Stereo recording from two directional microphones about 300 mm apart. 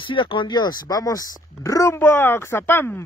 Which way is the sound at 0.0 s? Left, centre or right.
Centre.